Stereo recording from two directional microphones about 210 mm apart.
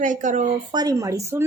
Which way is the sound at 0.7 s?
15° right (ahead or behind).